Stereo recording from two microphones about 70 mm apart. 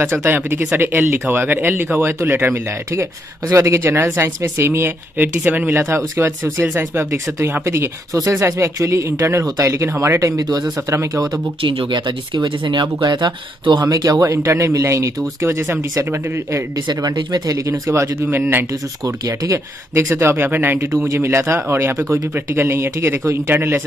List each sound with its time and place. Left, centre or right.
0.0 s speech: right
5.8 s speech: right
11.9 s speech: right
13.7 s speech: right
14.2 s speech: right
16.7 s speech: right
17.6 s speech: right
18.3 s speech: right
19.0 s speech: right